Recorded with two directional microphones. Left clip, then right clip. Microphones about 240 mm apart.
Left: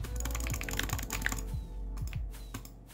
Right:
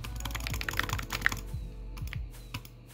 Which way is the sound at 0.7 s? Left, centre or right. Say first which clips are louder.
Right 3 dB; centre.